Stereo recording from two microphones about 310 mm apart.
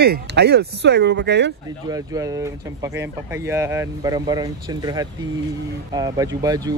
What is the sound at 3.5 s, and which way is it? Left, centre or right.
Speech, centre.